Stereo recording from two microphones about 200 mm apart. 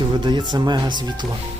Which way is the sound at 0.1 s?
25° right (ahead or behind).